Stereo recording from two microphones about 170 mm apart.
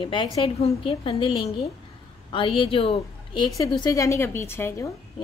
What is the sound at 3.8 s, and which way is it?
A woman's voice, 20° left (ahead or behind).